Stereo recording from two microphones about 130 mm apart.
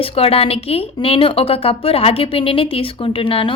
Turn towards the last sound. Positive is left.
turn(degrees=45)  # may be behind; listen again after turning